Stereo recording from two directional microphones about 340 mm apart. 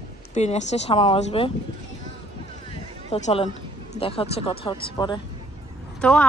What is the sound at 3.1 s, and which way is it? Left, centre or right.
Speech, centre.